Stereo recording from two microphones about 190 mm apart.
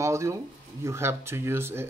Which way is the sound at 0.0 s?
15° right (ahead or behind).